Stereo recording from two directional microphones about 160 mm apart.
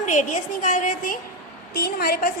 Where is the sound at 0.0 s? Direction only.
50° left (ahead or behind).